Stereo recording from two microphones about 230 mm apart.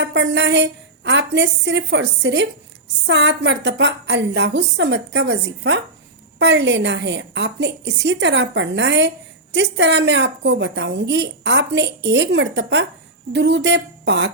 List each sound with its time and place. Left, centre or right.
0.0 s a woman's voice: right